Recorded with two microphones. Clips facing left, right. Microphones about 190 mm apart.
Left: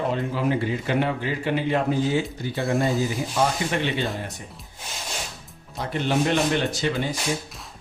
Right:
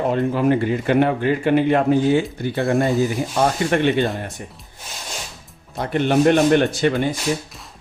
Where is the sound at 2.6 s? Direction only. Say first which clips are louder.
Right 4 dB; centre (ahead or behind).